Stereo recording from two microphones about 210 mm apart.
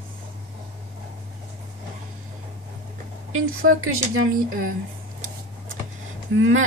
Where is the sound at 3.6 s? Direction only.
45° right (ahead or behind).